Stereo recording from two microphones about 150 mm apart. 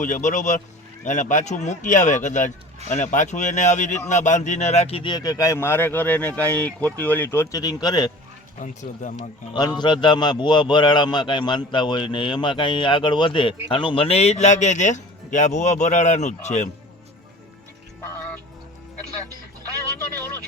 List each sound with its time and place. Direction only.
0.0 s speech: 55° left (ahead or behind); by 8.1 s 25° left (ahead or behind)
8.5 s speech: 55° left (ahead or behind)
9.5 s a man's voice: 30° left (ahead or behind); by 16.6 s 50° left (ahead or behind)